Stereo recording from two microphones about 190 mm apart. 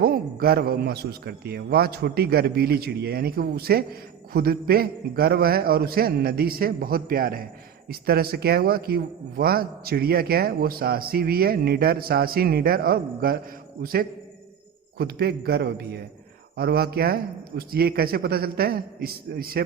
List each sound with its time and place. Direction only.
0.0 s a man's voice: 55° right (ahead or behind)